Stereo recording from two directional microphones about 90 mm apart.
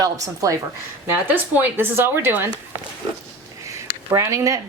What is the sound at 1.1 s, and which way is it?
Speech, 20° right (ahead or behind).